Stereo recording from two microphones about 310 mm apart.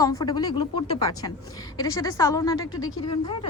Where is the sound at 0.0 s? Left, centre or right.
Centre.